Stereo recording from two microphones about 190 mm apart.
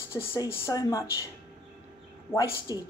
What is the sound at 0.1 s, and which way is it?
Speech, 15° left (ahead or behind).